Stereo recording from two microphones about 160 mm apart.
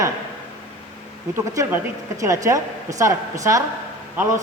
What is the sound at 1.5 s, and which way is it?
A woman's voice, 20° right (ahead or behind).